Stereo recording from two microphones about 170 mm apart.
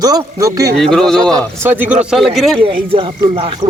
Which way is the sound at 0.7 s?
5° left (ahead or behind).